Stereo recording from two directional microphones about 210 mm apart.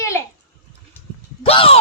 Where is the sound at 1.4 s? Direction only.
25° left (ahead or behind).